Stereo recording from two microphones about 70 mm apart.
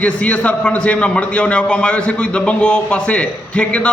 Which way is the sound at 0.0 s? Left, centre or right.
Centre.